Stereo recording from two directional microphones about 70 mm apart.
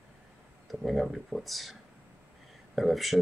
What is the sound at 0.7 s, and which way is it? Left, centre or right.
Speech, centre.